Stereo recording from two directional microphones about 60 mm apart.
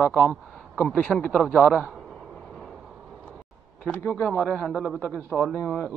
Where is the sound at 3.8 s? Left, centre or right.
Left.